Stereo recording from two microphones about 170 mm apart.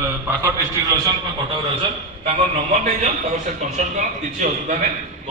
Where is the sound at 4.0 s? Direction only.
45° right (ahead or behind).